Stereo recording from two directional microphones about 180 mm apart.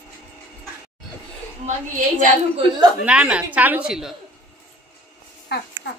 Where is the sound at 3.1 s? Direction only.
5° right (ahead or behind).